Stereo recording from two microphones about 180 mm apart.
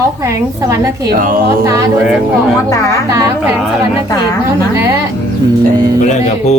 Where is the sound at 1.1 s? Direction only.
50° right (ahead or behind).